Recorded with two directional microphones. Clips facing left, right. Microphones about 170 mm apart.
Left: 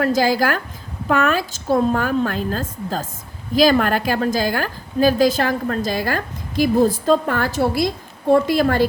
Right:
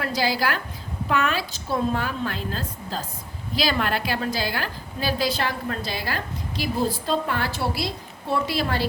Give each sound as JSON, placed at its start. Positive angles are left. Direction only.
{"t": 0.0, "sound": "a woman's voice", "side_deg": 45}